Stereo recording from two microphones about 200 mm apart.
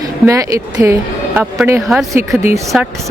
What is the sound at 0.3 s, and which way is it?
Speech, 15° right (ahead or behind).